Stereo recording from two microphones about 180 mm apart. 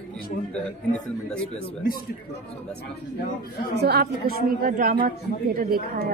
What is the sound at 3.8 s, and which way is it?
A woman's voice, 60° right (ahead or behind).